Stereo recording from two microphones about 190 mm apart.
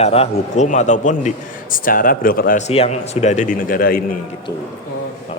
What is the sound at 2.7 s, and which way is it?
A man's voice, 35° left (ahead or behind).